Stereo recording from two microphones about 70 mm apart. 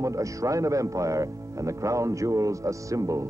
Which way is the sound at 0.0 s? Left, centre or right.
Right.